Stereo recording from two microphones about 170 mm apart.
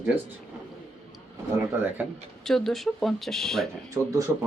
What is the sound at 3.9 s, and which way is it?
Speech, 20° right (ahead or behind).